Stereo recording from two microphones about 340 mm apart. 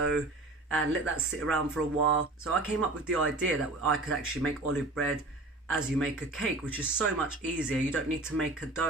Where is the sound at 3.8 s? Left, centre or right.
Right.